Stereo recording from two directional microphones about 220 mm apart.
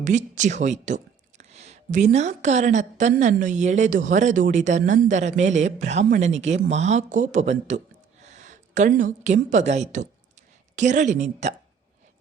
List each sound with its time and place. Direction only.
0.0 s a woman's voice: 35° right (ahead or behind)